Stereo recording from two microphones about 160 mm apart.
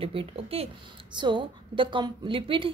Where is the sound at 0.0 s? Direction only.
35° right (ahead or behind).